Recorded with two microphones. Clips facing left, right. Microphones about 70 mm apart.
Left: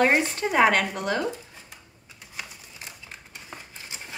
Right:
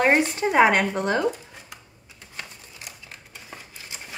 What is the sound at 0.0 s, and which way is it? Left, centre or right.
Speech, centre.